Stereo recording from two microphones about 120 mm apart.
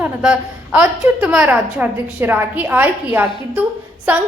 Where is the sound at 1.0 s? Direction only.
20° right (ahead or behind).